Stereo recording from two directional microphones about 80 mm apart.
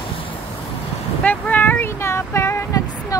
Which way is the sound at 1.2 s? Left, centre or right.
Left.